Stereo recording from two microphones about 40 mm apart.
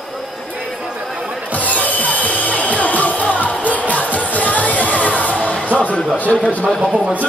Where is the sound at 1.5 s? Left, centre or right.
Left.